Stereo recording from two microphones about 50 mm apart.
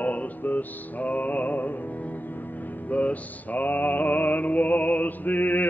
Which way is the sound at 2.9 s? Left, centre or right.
Left.